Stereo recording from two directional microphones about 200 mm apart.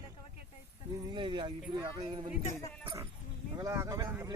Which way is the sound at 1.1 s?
25° right (ahead or behind).